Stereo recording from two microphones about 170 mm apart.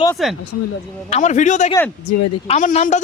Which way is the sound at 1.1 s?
45° left (ahead or behind).